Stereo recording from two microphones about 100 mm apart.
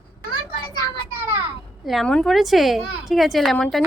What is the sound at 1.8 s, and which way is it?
A woman's voice, centre (ahead or behind).